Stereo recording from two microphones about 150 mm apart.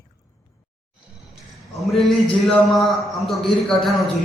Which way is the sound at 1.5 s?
Centre (ahead or behind).